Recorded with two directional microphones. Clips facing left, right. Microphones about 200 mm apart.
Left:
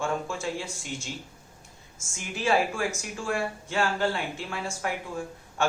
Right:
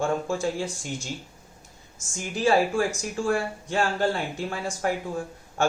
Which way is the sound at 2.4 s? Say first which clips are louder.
Right 4 dB; 35° right (ahead or behind).